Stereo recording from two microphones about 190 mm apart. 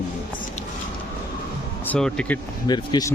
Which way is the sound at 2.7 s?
20° left (ahead or behind).